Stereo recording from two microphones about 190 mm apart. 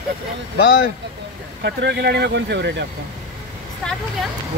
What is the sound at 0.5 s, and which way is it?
Speech, 55° left (ahead or behind).